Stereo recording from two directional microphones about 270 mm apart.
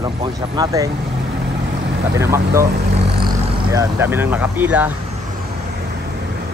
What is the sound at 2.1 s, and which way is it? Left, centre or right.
Speech, centre.